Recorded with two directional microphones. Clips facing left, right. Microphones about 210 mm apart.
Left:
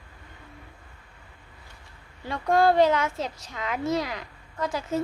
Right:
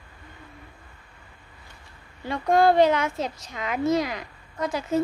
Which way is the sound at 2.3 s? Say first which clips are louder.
Right 2 dB; 15° right (ahead or behind).